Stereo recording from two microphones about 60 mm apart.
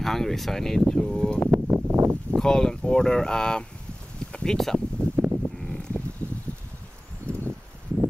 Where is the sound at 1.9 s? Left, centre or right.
Right.